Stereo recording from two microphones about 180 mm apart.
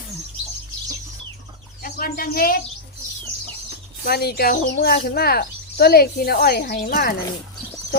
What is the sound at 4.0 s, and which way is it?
Speech, 60° left (ahead or behind).